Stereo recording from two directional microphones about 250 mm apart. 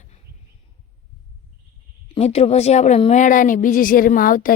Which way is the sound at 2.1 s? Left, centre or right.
Left.